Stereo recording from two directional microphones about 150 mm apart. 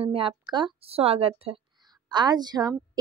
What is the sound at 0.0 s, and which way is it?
A woman's voice, 40° right (ahead or behind).